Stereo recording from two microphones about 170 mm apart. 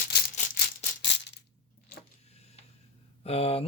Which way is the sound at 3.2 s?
35° left (ahead or behind).